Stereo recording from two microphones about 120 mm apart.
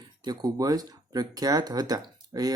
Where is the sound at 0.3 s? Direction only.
30° right (ahead or behind).